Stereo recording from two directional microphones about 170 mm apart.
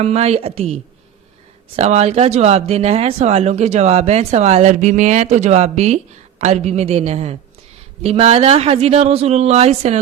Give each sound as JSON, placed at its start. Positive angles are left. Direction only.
{"t": 0.0, "sound": "speech", "side_deg": -40}